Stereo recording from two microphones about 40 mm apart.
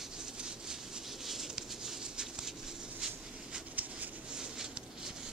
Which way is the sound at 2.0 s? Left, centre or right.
Centre.